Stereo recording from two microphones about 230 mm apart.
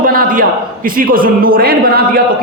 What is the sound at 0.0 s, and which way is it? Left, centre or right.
A man's voice, right.